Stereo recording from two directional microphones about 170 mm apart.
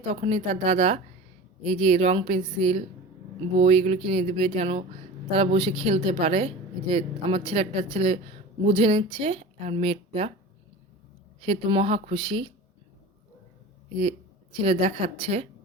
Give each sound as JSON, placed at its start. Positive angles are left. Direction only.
{"t": 0.1, "sound": "a woman's voice", "side_deg": -35}
{"t": 11.4, "sound": "a woman's voice", "side_deg": -35}
{"t": 14.6, "sound": "a woman's voice", "side_deg": -35}